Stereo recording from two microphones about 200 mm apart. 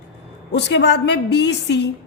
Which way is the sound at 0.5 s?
60° left (ahead or behind).